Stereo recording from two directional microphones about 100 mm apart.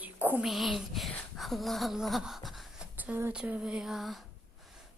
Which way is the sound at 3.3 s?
10° right (ahead or behind).